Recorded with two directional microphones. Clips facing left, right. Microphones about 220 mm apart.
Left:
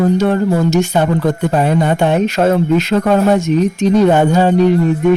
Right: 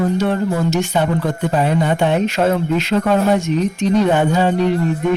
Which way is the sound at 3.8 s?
45° left (ahead or behind).